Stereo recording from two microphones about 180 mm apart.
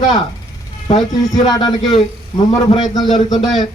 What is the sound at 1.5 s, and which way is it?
Speech, 25° left (ahead or behind).